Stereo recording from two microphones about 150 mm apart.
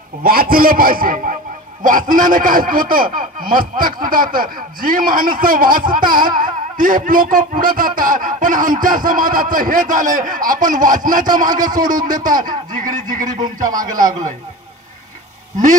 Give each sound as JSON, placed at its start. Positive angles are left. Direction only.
{"t": 0.2, "sound": "a man's voice", "side_deg": -80}